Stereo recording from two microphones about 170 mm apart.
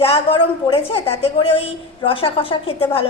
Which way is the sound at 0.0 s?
35° left (ahead or behind).